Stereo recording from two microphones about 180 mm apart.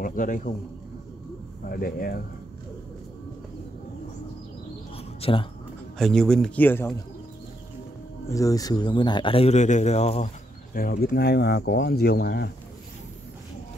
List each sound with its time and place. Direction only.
0.0 s a man's voice: 50° left (ahead or behind)
1.7 s speech: 55° left (ahead or behind)
4.9 s bird: 30° left (ahead or behind)
5.9 s a man's voice: centre (ahead or behind)
8.3 s speech: 20° left (ahead or behind); by 10.3 s 35° left (ahead or behind)
10.7 s speech: 55° left (ahead or behind)